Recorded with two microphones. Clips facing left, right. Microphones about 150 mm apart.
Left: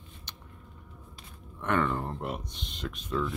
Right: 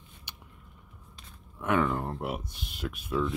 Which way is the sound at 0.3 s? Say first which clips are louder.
Even; 10° right (ahead or behind).